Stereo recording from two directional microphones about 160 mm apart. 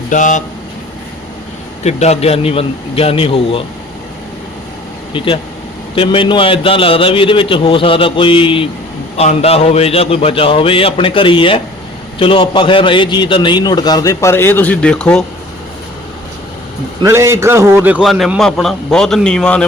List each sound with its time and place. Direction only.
0.1 s speech: 50° left (ahead or behind)
1.8 s a man's voice: 45° left (ahead or behind)
5.1 s a man's voice: 30° left (ahead or behind); by 15.2 s 5° left (ahead or behind)
17.0 s a man's voice: 15° right (ahead or behind)
18.0 s a man's voice: centre (ahead or behind)